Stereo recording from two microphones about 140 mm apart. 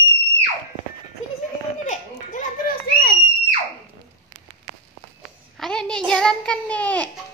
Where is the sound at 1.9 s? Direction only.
75° left (ahead or behind).